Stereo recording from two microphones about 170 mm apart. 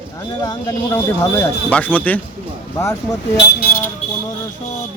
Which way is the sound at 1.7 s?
10° left (ahead or behind).